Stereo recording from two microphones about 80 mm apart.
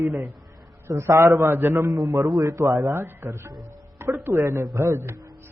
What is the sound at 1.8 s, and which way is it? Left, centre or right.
Speech, right.